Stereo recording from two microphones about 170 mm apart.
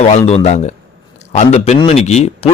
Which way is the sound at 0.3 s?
40° left (ahead or behind).